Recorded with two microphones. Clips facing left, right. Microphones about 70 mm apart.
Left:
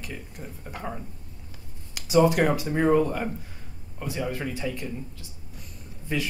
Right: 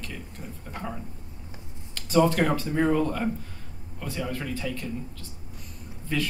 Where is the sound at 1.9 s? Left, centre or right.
Centre.